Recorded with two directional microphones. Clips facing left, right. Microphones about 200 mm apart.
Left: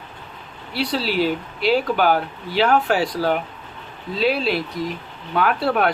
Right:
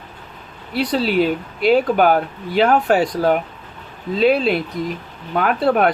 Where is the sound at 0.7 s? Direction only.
50° right (ahead or behind).